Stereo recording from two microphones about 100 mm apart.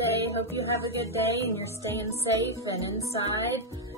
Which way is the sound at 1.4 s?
25° left (ahead or behind).